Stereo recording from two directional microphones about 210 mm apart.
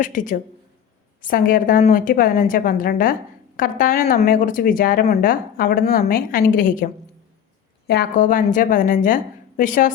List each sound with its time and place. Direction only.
0.0 s a woman's voice: 40° left (ahead or behind)